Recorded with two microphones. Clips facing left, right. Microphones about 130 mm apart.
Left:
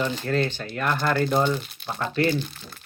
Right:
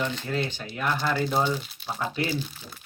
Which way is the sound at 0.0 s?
35° left (ahead or behind).